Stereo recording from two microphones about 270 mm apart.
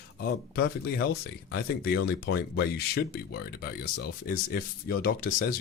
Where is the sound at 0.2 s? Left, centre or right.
Left.